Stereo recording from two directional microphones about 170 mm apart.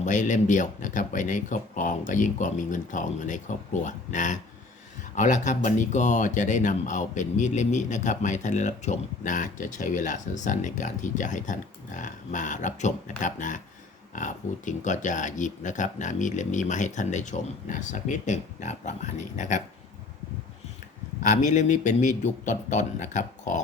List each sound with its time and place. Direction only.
0.0 s speech: 45° left (ahead or behind)
21.2 s speech: 45° left (ahead or behind)